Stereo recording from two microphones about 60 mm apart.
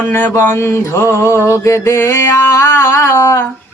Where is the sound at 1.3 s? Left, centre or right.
Right.